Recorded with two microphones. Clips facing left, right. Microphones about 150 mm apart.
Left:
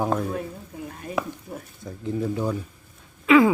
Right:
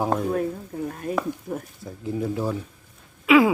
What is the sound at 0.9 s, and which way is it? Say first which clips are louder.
Stir: right 6 dB; 50° right (ahead or behind).